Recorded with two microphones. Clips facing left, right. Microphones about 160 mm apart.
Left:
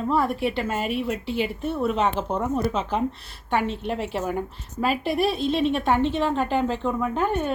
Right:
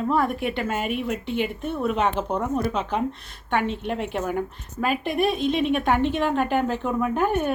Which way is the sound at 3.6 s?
35° left (ahead or behind).